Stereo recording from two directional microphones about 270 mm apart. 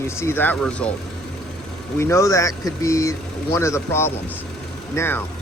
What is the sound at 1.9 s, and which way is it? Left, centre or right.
Speech, centre.